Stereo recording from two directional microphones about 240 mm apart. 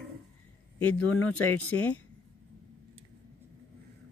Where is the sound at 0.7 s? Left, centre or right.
Centre.